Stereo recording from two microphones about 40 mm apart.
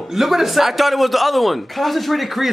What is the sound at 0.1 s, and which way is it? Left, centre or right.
Speech, centre.